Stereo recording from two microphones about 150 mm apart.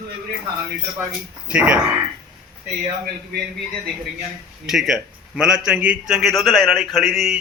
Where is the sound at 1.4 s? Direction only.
5° right (ahead or behind).